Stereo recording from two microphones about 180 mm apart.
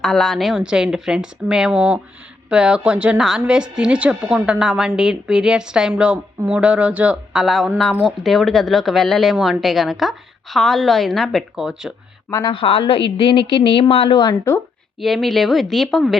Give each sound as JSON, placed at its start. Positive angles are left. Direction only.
{"t": 0.0, "sound": "a woman's voice", "side_deg": 5}
{"t": 12.3, "sound": "speech", "side_deg": 20}
{"t": 12.5, "sound": "a woman's voice", "side_deg": 30}
{"t": 15.0, "sound": "a woman's voice", "side_deg": 0}